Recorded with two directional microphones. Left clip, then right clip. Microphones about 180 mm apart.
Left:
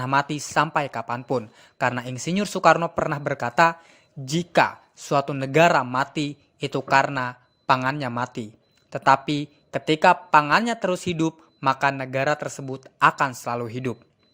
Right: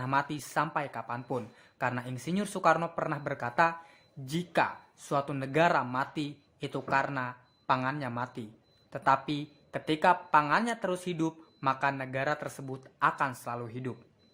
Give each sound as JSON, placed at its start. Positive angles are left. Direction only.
{"t": 0.0, "sound": "speech", "side_deg": 40}